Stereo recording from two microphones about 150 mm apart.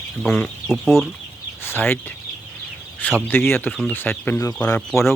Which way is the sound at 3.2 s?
15° left (ahead or behind).